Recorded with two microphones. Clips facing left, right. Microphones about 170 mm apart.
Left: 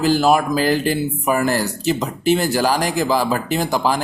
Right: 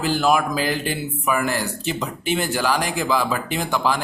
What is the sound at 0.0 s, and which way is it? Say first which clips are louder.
Speech: left 4 dB; 40° left (ahead or behind).